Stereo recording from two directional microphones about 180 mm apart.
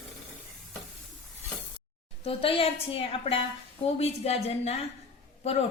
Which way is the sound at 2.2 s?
30° left (ahead or behind).